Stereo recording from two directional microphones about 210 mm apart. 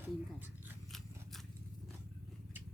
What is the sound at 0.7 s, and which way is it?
Scissors, centre (ahead or behind).